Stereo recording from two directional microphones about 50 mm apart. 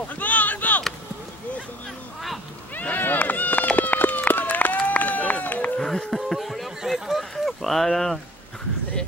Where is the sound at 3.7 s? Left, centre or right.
Left.